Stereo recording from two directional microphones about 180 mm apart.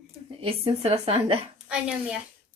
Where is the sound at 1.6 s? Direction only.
5° right (ahead or behind).